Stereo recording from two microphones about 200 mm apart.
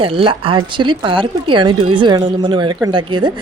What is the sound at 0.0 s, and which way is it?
A woman's voice, 25° right (ahead or behind).